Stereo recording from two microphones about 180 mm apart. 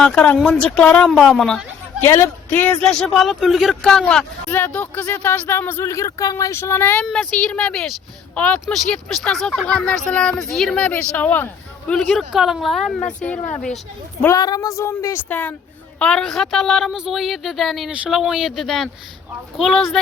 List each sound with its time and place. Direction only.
0.0 s speech: 5° left (ahead or behind)
2.0 s speech: 15° left (ahead or behind)
14.2 s speech: 15° left (ahead or behind); by 20.0 s centre (ahead or behind)